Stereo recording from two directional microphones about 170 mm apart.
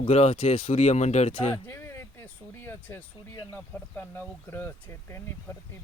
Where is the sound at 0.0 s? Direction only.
40° left (ahead or behind).